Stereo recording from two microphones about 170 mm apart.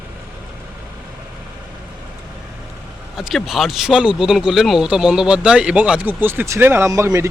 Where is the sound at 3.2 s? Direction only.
Centre (ahead or behind).